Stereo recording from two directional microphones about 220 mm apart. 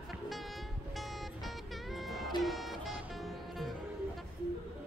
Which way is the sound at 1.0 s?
Centre (ahead or behind).